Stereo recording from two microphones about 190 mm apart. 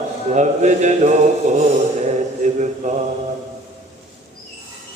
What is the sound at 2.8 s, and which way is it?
Mantra, 35° right (ahead or behind).